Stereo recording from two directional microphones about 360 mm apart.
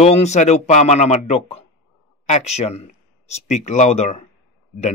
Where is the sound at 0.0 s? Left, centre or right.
Centre.